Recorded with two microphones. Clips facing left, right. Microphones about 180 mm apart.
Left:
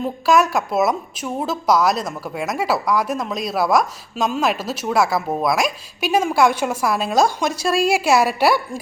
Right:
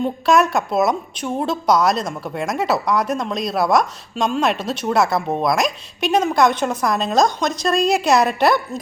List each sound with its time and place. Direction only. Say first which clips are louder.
0.0 s a woman's voice: right 1 dB; centre (ahead or behind)